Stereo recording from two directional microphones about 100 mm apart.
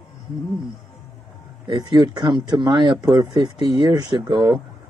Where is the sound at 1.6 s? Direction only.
50° right (ahead or behind).